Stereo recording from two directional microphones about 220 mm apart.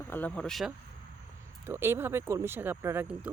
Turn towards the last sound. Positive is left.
turn(degrees=-10)  # may be behind; listen again after turning